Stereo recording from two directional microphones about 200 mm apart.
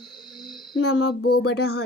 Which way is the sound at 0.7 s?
60° left (ahead or behind).